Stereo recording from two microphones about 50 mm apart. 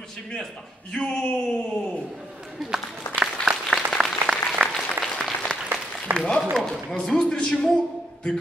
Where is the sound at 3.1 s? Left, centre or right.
Centre.